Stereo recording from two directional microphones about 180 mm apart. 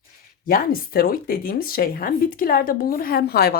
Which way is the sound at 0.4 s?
55° left (ahead or behind).